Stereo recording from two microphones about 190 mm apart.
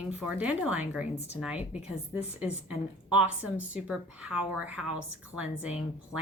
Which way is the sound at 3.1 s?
5° right (ahead or behind).